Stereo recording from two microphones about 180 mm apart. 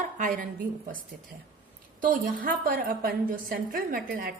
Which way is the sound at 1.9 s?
50° right (ahead or behind).